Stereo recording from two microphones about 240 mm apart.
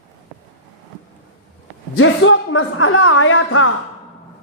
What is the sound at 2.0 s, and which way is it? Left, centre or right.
A man's voice, left.